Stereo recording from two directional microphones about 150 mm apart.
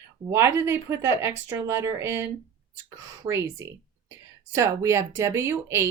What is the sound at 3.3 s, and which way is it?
Speech, 15° right (ahead or behind).